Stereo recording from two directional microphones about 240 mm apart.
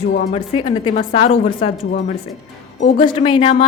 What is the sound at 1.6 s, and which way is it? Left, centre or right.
Speech, left.